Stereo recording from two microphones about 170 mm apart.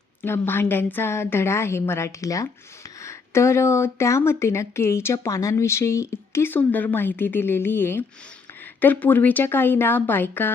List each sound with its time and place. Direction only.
0.2 s speech: 15° left (ahead or behind)